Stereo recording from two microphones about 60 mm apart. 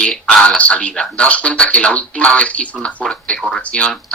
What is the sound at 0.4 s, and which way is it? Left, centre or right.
Speech, left.